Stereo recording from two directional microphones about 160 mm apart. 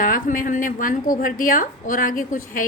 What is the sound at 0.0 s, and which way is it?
A woman's voice, 60° left (ahead or behind).